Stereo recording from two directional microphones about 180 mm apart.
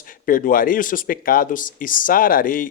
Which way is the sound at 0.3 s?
50° left (ahead or behind).